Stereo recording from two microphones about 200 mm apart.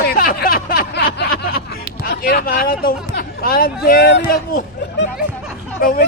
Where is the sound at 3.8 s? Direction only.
55° left (ahead or behind).